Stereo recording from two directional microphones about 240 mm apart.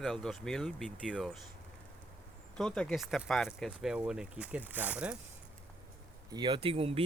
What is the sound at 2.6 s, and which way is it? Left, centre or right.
Speech, centre.